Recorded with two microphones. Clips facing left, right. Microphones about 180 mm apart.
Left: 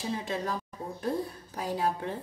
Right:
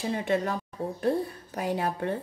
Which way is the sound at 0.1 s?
65° right (ahead or behind).